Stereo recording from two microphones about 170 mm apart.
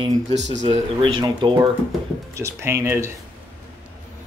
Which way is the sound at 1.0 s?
30° right (ahead or behind).